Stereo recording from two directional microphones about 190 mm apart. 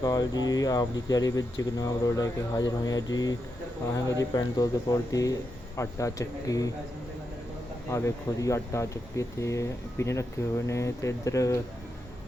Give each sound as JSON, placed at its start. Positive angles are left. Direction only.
{"t": 0.0, "sound": "speech", "side_deg": 20}
{"t": 7.9, "sound": "speech", "side_deg": 15}